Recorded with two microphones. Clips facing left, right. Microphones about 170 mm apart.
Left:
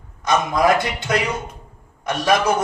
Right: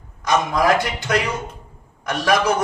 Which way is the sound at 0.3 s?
25° left (ahead or behind).